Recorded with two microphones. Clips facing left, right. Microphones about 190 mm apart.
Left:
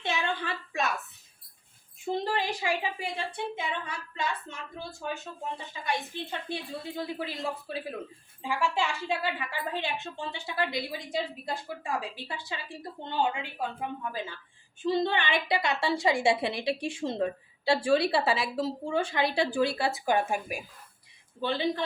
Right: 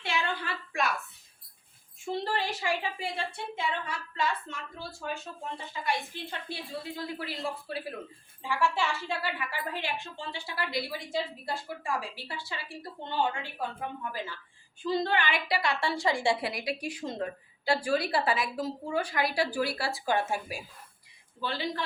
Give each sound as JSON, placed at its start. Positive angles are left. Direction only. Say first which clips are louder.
{"t": 0.0, "sound": "a sound", "louder": "left 2 dB", "side_deg": 20}
{"t": 2.0, "sound": "a woman's voice", "louder": "left 2 dB", "side_deg": 15}
{"t": 6.5, "sound": "a woman's voice", "louder": "left 2 dB", "side_deg": 20}